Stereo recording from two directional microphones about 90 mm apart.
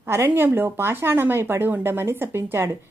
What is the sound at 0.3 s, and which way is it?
Speech, 25° right (ahead or behind).